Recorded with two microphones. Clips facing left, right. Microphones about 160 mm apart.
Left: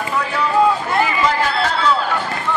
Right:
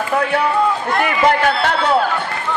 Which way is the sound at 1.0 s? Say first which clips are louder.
Right 3 dB; 60° right (ahead or behind).